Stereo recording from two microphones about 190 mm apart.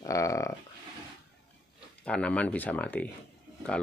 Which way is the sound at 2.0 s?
5° left (ahead or behind).